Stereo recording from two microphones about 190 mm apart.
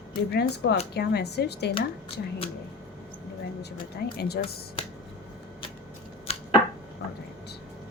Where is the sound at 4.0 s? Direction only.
60° left (ahead or behind).